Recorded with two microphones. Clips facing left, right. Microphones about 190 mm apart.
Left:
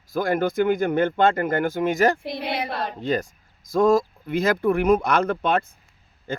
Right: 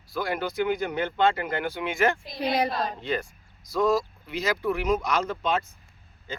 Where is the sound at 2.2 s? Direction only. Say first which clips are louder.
Right 1 dB; 65° left (ahead or behind).